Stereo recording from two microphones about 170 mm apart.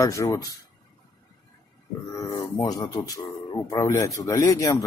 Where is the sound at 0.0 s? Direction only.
15° left (ahead or behind).